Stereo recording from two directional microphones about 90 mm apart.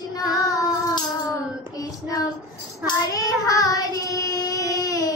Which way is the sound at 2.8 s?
40° left (ahead or behind).